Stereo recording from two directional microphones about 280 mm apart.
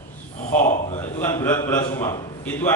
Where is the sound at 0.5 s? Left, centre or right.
Left.